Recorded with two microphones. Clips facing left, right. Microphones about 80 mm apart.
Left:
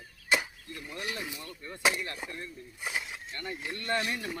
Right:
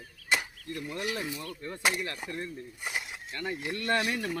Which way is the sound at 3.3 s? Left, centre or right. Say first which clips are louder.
Right 6 dB; right.